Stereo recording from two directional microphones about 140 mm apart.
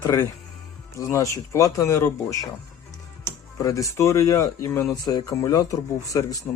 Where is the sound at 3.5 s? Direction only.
25° left (ahead or behind).